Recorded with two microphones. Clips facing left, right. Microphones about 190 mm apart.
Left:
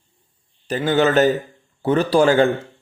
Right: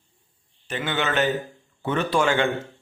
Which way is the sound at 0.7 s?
40° left (ahead or behind).